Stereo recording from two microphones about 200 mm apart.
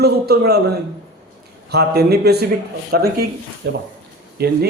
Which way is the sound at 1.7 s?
55° right (ahead or behind).